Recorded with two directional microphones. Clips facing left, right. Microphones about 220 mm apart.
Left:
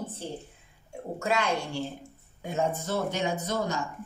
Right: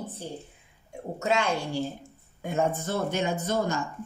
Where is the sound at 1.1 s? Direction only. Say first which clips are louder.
Right 2 dB; 25° right (ahead or behind).